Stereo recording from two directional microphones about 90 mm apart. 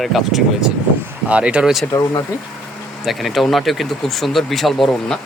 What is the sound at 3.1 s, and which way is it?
Speech, centre (ahead or behind).